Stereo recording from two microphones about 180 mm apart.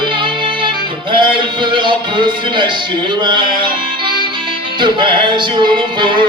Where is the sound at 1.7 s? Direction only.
25° right (ahead or behind).